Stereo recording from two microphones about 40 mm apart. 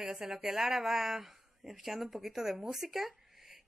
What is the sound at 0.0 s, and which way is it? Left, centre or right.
Speech, centre.